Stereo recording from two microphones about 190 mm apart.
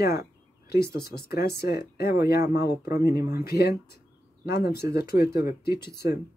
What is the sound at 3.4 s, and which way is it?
Speech, 55° left (ahead or behind).